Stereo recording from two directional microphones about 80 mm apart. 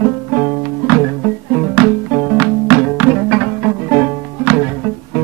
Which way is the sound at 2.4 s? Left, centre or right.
Right.